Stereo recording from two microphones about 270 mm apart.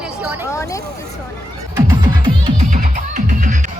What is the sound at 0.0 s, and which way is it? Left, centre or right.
Hubbub, centre.